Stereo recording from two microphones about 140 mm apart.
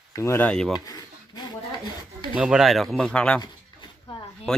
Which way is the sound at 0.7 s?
25° left (ahead or behind).